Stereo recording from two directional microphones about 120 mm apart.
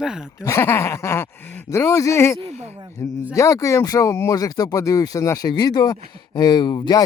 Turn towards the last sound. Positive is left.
turn(degrees=35)  # may be behind; listen again after turning